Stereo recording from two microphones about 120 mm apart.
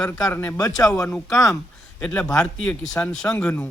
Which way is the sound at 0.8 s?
5° left (ahead or behind).